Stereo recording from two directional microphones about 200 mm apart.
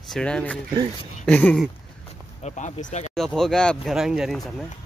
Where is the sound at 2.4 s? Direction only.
35° left (ahead or behind).